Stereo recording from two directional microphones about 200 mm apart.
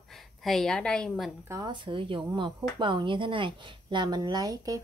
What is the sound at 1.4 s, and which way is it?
A woman's voice, 20° right (ahead or behind).